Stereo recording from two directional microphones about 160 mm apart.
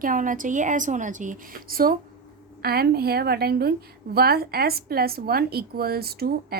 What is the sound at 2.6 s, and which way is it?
Speech, 75° right (ahead or behind).